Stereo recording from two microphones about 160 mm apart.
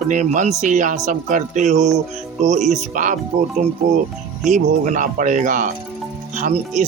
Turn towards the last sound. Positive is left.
turn(degrees=-50)  # may be behind; listen again after turning